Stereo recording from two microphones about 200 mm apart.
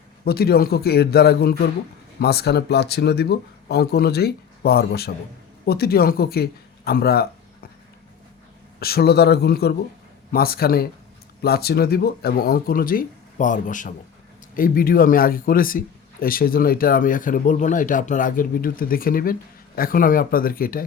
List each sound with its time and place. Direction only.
0.3 s speech: 50° left (ahead or behind)
8.8 s speech: 50° left (ahead or behind)